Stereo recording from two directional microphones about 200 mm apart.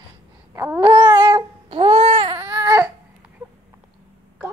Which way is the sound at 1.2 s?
25° right (ahead or behind).